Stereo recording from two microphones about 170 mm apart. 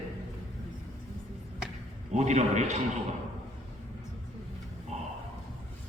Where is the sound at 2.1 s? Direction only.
45° right (ahead or behind).